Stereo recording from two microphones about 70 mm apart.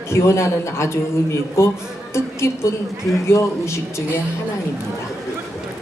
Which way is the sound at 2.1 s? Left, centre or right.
Left.